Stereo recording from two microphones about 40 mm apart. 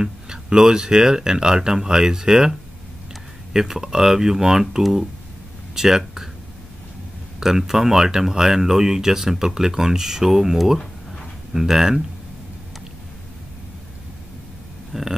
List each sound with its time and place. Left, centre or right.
0.0 s speech: centre
3.5 s speech: centre
7.3 s speech: centre
14.9 s a sound: centre